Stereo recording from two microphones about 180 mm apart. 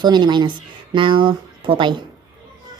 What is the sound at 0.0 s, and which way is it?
Speech, 25° right (ahead or behind).